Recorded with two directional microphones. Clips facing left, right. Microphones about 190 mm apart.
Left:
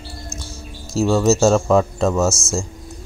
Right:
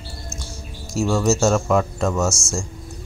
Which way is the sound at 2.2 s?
5° left (ahead or behind).